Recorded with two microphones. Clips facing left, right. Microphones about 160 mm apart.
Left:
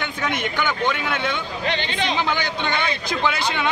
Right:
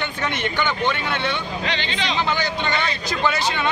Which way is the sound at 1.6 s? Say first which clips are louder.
Left 4 dB; 50° left (ahead or behind).